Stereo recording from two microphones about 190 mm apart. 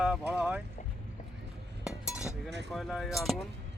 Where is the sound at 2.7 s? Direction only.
Centre (ahead or behind).